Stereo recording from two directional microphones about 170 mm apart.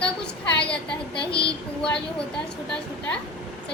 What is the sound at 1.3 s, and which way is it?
Speech, 30° left (ahead or behind).